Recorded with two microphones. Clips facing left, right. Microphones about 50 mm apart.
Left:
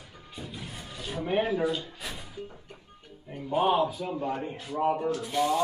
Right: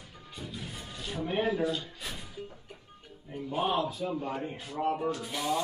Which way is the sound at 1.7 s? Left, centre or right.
Left.